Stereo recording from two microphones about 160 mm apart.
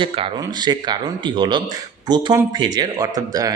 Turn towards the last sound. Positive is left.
turn(degrees=-25)  # may be behind; listen again after turning